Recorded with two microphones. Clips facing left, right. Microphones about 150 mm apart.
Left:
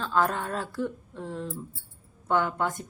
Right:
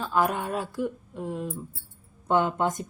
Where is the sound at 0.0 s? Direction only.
10° right (ahead or behind).